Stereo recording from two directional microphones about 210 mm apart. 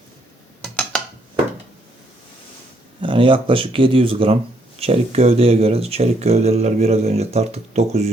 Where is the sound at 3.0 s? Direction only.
25° right (ahead or behind).